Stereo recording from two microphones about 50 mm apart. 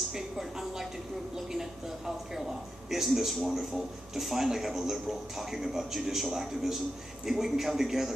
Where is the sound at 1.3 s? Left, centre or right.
Centre.